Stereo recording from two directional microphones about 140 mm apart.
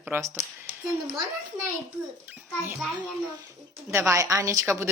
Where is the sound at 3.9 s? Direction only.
20° right (ahead or behind).